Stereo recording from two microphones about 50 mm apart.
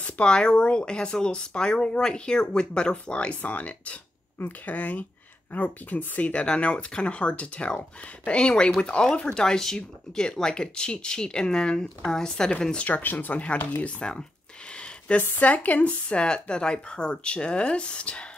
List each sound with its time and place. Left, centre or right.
0.0 s speech: centre
12.7 s speech: left